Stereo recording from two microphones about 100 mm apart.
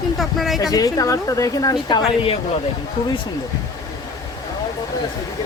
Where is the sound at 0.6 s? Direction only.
40° left (ahead or behind).